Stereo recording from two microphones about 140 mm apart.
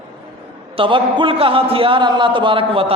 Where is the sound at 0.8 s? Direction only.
35° right (ahead or behind).